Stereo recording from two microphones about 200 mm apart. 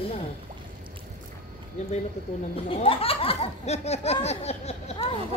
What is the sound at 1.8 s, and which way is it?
Speech, 35° left (ahead or behind).